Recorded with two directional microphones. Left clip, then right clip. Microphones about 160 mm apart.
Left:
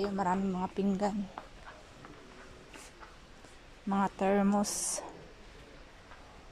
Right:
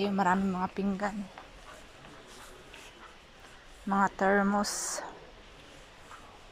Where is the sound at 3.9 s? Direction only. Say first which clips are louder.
Right 4 dB; 10° left (ahead or behind).